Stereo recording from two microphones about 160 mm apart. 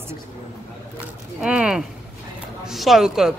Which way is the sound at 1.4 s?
5° right (ahead or behind).